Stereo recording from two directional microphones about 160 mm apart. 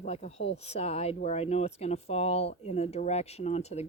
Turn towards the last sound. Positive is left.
turn(degrees=40)  # may be behind; listen again after turning